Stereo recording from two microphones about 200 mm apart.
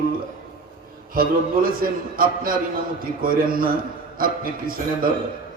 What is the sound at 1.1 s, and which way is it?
A man's voice, 45° right (ahead or behind).